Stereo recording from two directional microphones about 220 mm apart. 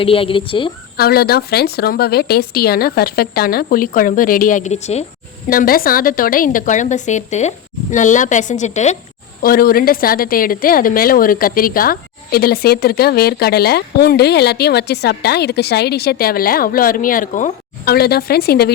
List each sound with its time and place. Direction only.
0.0 s speech: 25° left (ahead or behind)
0.9 s a woman's voice: 45° left (ahead or behind)
5.5 s a woman's voice: 40° left (ahead or behind)